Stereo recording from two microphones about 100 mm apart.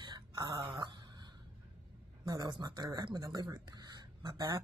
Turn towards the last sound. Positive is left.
turn(degrees=-40)  # may be behind; listen again after turning